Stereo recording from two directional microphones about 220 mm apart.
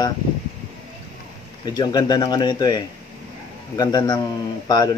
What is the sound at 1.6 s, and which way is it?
Speech, 20° left (ahead or behind).